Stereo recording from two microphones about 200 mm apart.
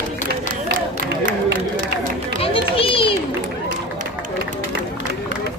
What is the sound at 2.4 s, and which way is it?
Run, 25° left (ahead or behind).